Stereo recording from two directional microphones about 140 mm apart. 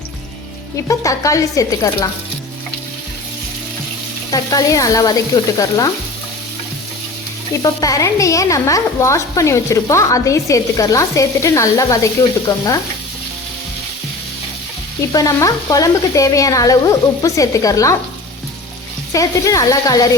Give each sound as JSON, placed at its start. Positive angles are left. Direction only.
{"t": 0.9, "sound": "a woman's voice", "side_deg": 25}
{"t": 4.3, "sound": "a woman's voice", "side_deg": 25}
{"t": 7.6, "sound": "a woman's voice", "side_deg": 25}
{"t": 15.1, "sound": "a woman's voice", "side_deg": 25}
{"t": 19.1, "sound": "a woman's voice", "side_deg": 25}